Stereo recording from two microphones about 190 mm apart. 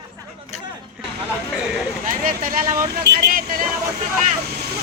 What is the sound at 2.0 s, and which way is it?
Speech, 45° right (ahead or behind).